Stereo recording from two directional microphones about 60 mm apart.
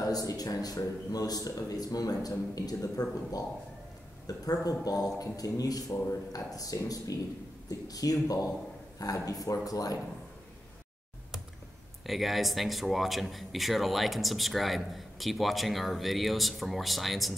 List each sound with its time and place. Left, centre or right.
0.0 s a man's voice: left
8.9 s a man's voice: left
12.1 s speech: centre